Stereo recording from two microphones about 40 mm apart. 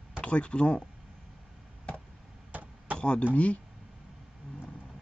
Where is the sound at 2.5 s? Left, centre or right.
Right.